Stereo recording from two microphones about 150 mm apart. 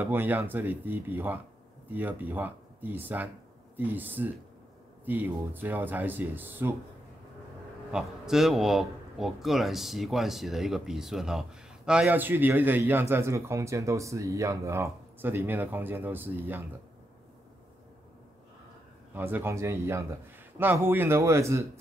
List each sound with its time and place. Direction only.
0.0 s a man's voice: 15° right (ahead or behind)
7.9 s a man's voice: 5° right (ahead or behind)
19.1 s a man's voice: 15° right (ahead or behind)